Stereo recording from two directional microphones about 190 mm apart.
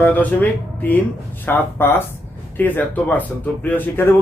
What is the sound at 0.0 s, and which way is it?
Speech, 10° left (ahead or behind).